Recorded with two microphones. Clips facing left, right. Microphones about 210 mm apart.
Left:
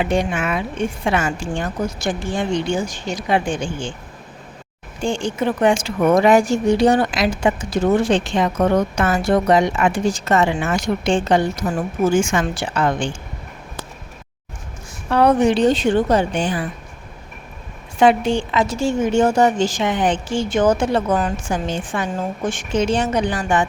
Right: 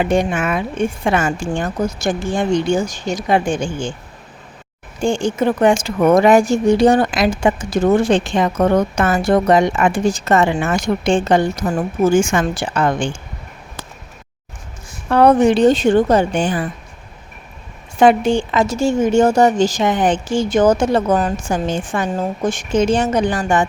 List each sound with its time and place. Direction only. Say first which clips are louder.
0.0 s a woman's voice: right 3 dB; 45° right (ahead or behind)
5.0 s a woman's voice: right 4 dB; 45° right (ahead or behind)
15.1 s a woman's voice: right 3 dB; 50° right (ahead or behind)
18.0 s a woman's voice: right 3 dB; 45° right (ahead or behind)